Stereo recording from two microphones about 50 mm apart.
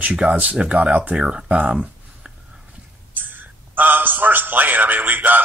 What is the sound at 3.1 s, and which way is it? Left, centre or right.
A man's voice, right.